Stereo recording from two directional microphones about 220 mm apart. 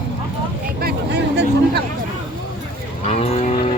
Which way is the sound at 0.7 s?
50° right (ahead or behind).